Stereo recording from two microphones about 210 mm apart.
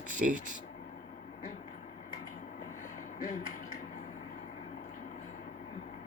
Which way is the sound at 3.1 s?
40° left (ahead or behind).